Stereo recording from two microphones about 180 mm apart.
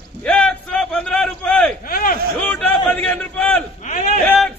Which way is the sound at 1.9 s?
55° left (ahead or behind).